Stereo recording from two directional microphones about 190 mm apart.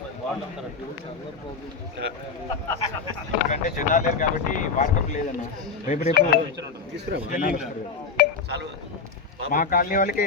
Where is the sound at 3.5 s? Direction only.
40° left (ahead or behind).